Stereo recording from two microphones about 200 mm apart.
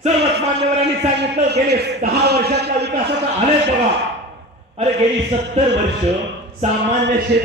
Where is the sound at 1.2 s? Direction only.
55° right (ahead or behind).